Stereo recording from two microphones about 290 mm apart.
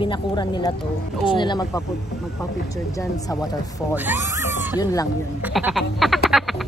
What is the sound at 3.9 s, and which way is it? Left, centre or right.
Speech, centre.